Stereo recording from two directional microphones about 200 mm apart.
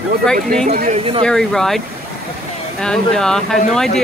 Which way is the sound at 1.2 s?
Centre (ahead or behind).